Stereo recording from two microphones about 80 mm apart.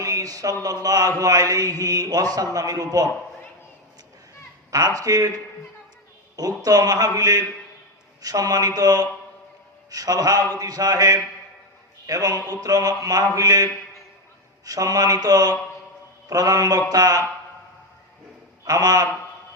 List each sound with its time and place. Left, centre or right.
0.0 s a sound: right
0.6 s mantra: right
4.7 s mantra: right
6.3 s mantra: right
18.6 s a man's voice: right